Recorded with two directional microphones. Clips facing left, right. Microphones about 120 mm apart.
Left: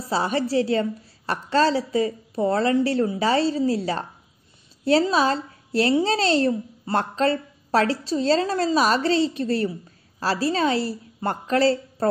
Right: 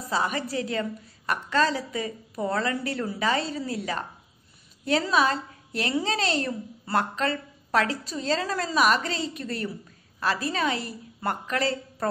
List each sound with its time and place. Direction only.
0.1 s speech: 30° left (ahead or behind)